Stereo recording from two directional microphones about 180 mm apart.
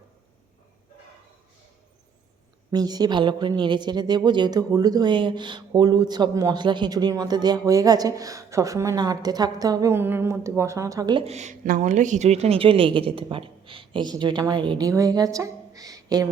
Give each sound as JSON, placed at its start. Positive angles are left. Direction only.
{"t": 2.7, "sound": "speech", "side_deg": -20}
{"t": 11.2, "sound": "speech", "side_deg": -40}